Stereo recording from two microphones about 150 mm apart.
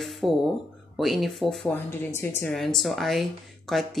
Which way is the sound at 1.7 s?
15° left (ahead or behind).